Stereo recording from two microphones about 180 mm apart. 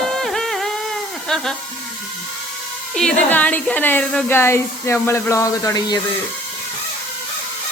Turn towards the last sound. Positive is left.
turn(degrees=20)  # may be behind; listen again after turning